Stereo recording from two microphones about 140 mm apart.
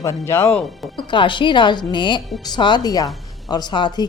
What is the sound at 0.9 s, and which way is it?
Speech, 35° left (ahead or behind).